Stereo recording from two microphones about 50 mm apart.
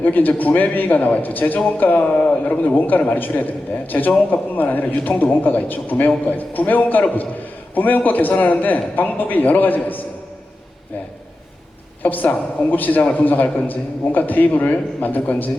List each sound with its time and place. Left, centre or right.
0.0 s a man's voice: left
12.0 s a man's voice: left